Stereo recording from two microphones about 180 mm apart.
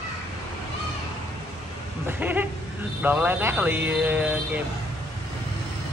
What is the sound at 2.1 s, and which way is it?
Speech, 10° right (ahead or behind).